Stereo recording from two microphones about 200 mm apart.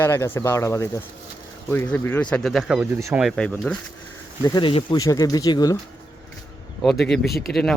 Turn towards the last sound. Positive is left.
turn(degrees=0)  # may be behind; listen again after turning